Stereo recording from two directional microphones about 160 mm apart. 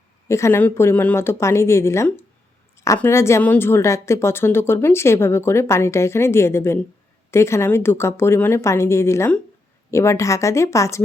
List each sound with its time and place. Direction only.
0.3 s a woman's voice: 20° left (ahead or behind)